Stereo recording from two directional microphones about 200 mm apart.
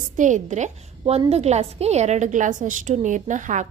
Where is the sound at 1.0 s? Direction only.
25° right (ahead or behind).